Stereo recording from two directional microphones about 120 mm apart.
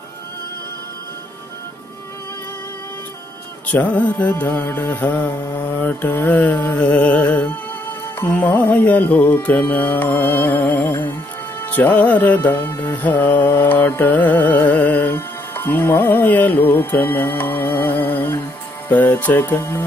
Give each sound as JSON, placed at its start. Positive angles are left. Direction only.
{"t": 3.6, "sound": "music", "side_deg": 10}